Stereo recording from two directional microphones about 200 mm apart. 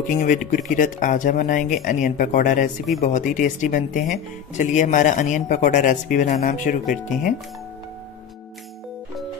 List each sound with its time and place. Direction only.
0.2 s speech: 40° left (ahead or behind)